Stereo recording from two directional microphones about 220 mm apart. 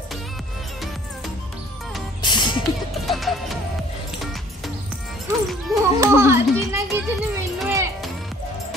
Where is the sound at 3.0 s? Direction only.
Centre (ahead or behind).